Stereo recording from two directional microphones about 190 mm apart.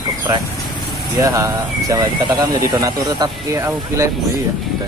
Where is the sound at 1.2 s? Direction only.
20° right (ahead or behind).